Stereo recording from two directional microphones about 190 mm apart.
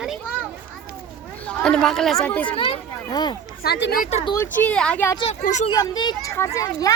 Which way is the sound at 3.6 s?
55° left (ahead or behind).